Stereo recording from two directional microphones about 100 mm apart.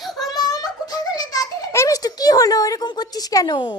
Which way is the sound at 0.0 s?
Centre (ahead or behind).